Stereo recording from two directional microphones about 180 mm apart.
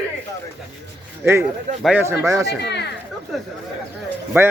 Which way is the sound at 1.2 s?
15° right (ahead or behind).